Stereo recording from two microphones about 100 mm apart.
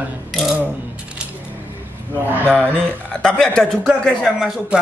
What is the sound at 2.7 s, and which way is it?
Speech, 10° left (ahead or behind).